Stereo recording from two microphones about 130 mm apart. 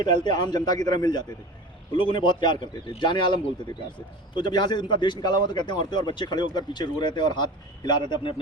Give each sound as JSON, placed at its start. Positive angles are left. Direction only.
{"t": 0.0, "sound": "a man's voice", "side_deg": 35}
{"t": 4.4, "sound": "a man's voice", "side_deg": 35}